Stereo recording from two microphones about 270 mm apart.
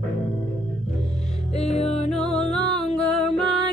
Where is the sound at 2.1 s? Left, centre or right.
Centre.